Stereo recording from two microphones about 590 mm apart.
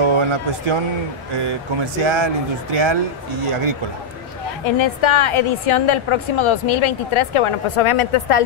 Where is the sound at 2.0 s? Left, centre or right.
Right.